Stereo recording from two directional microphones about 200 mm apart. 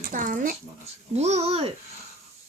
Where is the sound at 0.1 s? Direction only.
40° right (ahead or behind).